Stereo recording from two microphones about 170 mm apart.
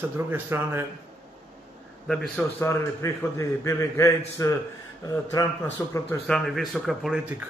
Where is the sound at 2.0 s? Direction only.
5° left (ahead or behind).